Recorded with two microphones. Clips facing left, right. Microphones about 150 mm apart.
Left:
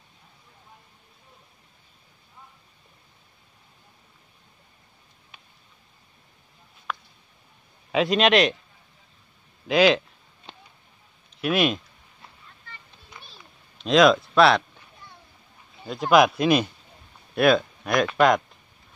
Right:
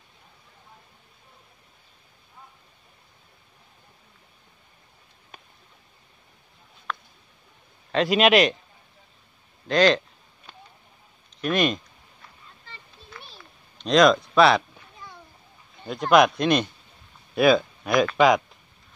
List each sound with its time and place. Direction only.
5.3 s a sound: 45° right (ahead or behind)
6.9 s a sound: 5° left (ahead or behind)
7.9 s speech: centre (ahead or behind)
9.7 s speech: 5° left (ahead or behind)
11.4 s speech: 5° left (ahead or behind)
13.7 s speech: 5° left (ahead or behind)
15.8 s speech: centre (ahead or behind)